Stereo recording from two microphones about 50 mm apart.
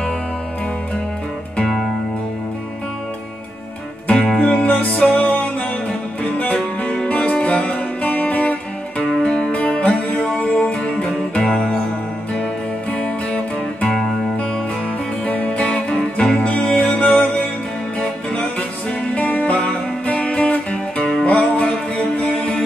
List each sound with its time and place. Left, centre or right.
4.4 s music: left
9.1 s music: centre
11.4 s music: centre
12.9 s music: left
15.2 s music: left
19.1 s music: left